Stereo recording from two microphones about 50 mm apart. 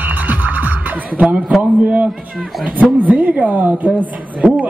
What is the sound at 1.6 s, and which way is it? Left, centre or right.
A man's voice, right.